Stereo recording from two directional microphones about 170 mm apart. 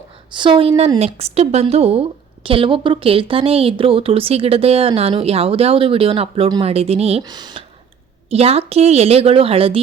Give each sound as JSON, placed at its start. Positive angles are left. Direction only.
{"t": 0.3, "sound": "a woman's voice", "side_deg": -30}
{"t": 7.2, "sound": "a woman's voice", "side_deg": -25}
{"t": 8.3, "sound": "a woman's voice", "side_deg": -35}